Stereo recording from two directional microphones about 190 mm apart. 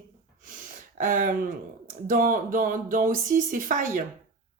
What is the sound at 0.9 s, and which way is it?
Speech, 45° right (ahead or behind).